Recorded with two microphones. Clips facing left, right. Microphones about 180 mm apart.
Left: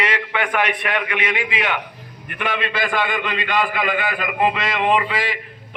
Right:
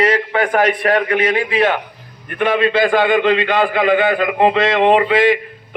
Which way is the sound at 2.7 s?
55° right (ahead or behind).